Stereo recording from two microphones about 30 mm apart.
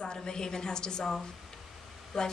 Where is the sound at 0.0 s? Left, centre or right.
Left.